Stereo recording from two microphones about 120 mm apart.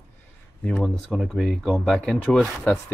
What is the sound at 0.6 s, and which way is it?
Speech, 5° left (ahead or behind).